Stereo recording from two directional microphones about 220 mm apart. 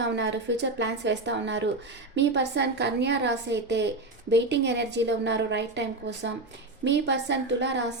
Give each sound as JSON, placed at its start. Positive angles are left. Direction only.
{"t": 0.0, "sound": "a woman's voice", "side_deg": -55}